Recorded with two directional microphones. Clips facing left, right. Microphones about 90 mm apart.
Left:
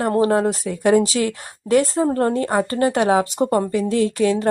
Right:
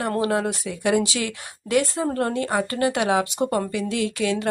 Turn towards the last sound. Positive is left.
turn(degrees=35)  # may be behind; listen again after turning